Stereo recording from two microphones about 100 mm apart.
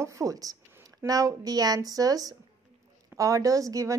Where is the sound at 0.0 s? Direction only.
30° right (ahead or behind).